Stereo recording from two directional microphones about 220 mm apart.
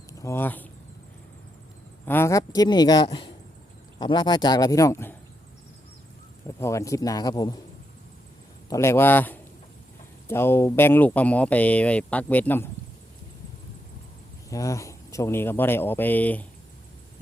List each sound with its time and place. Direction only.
0.1 s speech: 15° left (ahead or behind)
2.0 s speech: 10° left (ahead or behind)
6.6 s speech: 15° left (ahead or behind)
8.7 s speech: 10° left (ahead or behind)
14.5 s speech: 15° left (ahead or behind)